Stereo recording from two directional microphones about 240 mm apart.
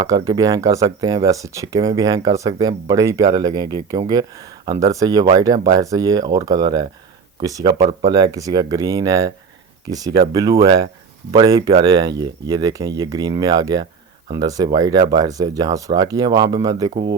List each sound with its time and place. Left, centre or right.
0.0 s speech: centre